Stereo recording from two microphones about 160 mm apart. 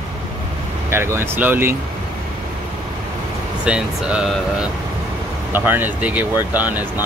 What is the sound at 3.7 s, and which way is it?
Speech, 5° right (ahead or behind).